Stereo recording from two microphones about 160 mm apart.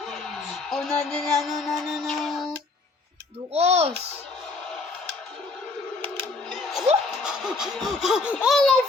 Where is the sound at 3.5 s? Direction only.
40° right (ahead or behind).